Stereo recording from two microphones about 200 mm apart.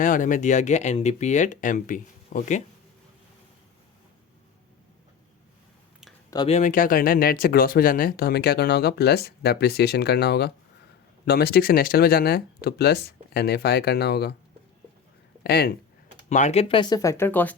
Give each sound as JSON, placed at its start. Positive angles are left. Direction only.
{"t": 0.0, "sound": "speech", "side_deg": 40}
{"t": 6.3, "sound": "speech", "side_deg": 25}
{"t": 6.6, "sound": "speech", "side_deg": 40}
{"t": 15.4, "sound": "speech", "side_deg": 55}
{"t": 16.3, "sound": "speech", "side_deg": 35}